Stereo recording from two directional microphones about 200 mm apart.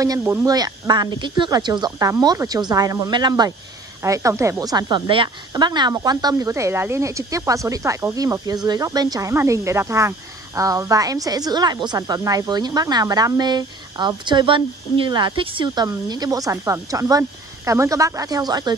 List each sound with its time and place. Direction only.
0.0 s speech: 15° right (ahead or behind)